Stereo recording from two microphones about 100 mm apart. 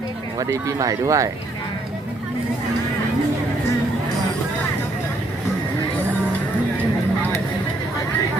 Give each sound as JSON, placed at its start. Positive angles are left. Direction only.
{"t": 0.3, "sound": "speech", "side_deg": -35}